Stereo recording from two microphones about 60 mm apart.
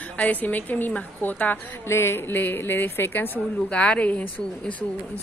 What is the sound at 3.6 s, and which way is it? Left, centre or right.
Speech, centre.